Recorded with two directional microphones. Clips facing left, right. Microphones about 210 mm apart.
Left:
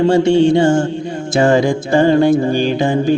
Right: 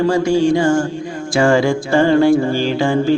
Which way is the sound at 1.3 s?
20° left (ahead or behind).